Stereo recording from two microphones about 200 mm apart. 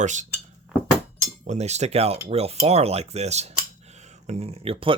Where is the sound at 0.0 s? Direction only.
35° right (ahead or behind).